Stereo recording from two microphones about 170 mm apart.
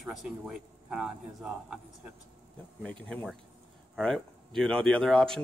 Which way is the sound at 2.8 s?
5° left (ahead or behind).